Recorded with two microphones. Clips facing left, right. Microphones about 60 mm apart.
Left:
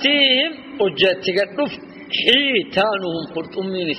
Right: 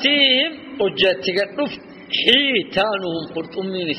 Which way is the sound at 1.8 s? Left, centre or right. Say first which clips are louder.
Left 2 dB; left.